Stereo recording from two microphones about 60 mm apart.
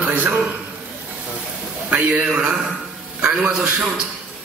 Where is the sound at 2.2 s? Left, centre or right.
Centre.